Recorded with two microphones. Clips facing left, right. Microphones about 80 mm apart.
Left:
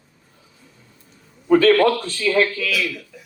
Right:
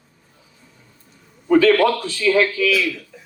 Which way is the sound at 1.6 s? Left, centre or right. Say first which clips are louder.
Right 2 dB; left.